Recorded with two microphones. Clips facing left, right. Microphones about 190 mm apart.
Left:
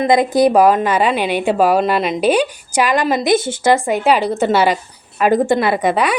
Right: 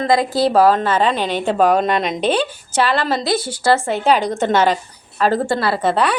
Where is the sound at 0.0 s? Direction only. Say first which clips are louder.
Left 4 dB; 20° left (ahead or behind).